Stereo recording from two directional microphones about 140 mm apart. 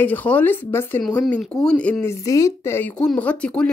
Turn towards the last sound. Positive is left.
turn(degrees=10)  # may be behind; listen again after turning